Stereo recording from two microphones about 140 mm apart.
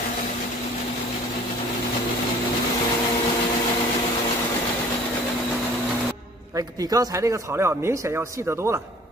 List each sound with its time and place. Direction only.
6.5 s speech: 25° right (ahead or behind)